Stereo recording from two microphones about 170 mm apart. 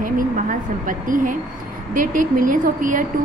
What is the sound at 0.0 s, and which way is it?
Speech, 55° right (ahead or behind).